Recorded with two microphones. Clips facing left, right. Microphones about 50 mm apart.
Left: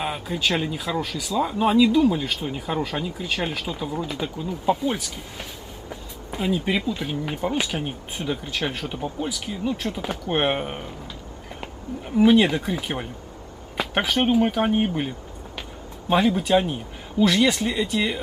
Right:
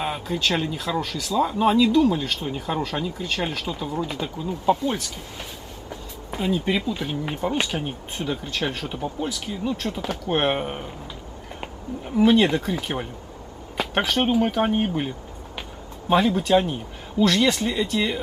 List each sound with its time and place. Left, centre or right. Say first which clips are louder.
0.0 s speech: even; centre
12.2 s speech: left 1 dB; centre